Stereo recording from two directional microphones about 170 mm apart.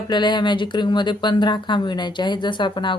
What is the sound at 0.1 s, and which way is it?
Speech, 25° left (ahead or behind).